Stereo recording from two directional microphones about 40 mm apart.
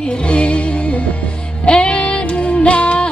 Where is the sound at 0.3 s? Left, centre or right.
Left.